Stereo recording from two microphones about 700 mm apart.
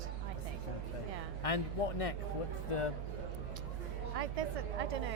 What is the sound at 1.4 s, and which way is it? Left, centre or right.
Speech, left.